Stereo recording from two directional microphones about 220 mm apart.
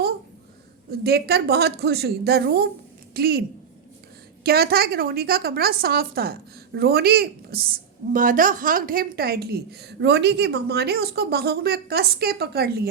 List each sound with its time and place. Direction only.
0.9 s a woman's voice: 45° right (ahead or behind)
4.4 s a woman's voice: 45° right (ahead or behind)